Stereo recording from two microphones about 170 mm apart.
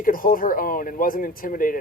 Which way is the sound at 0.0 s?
55° left (ahead or behind).